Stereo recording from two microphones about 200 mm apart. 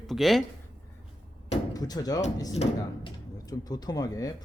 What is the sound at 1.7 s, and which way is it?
Speech, 20° left (ahead or behind).